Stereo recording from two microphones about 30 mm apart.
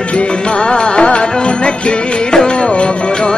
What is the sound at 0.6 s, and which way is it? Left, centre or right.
Music, left.